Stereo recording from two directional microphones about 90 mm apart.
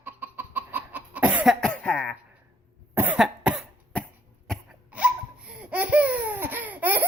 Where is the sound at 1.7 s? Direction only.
15° left (ahead or behind).